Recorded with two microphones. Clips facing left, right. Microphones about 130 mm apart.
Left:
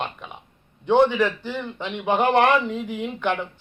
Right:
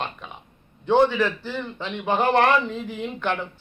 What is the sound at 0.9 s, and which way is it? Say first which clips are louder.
A man's voice: left 1 dB; 15° left (ahead or behind).